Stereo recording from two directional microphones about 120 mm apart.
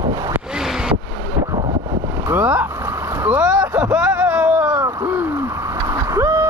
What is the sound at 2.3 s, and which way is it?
Boat, 15° right (ahead or behind).